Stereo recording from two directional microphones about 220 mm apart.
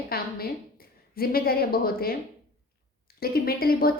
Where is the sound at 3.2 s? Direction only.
45° left (ahead or behind).